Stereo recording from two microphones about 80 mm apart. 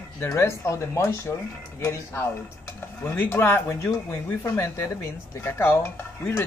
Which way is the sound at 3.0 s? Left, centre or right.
Left.